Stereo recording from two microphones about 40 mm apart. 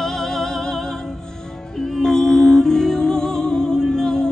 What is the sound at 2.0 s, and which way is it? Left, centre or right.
Music, centre.